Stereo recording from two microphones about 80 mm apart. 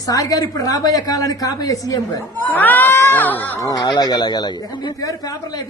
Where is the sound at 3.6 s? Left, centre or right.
Left.